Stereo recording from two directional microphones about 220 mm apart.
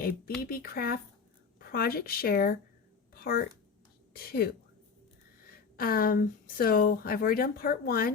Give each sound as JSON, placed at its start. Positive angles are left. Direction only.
{"t": 0.0, "sound": "a woman's voice", "side_deg": 45}
{"t": 5.5, "sound": "speech", "side_deg": 40}